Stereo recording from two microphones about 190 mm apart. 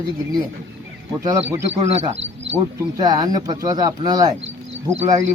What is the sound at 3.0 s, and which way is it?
Speech, 20° right (ahead or behind).